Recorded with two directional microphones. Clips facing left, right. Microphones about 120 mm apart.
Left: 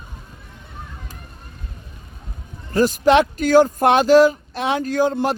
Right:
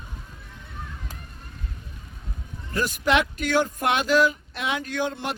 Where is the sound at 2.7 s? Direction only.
35° left (ahead or behind).